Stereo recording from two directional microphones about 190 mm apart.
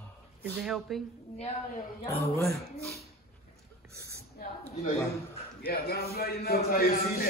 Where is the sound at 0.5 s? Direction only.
Centre (ahead or behind).